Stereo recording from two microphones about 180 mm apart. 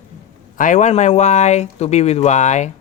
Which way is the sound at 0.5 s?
45° left (ahead or behind).